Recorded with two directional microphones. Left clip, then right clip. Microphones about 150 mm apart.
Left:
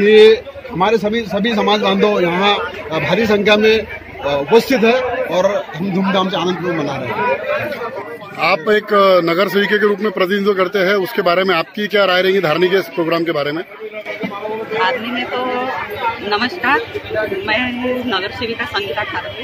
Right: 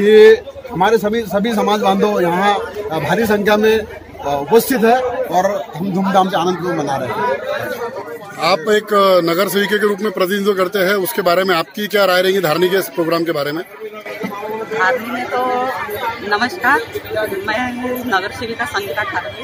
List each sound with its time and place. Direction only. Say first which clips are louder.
0.0 s speech: right 1 dB; centre (ahead or behind)
8.4 s speech: even; centre (ahead or behind)
14.8 s speech: right 1 dB; 20° left (ahead or behind)